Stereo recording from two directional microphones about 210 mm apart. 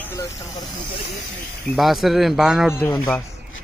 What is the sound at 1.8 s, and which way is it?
Speech, centre (ahead or behind).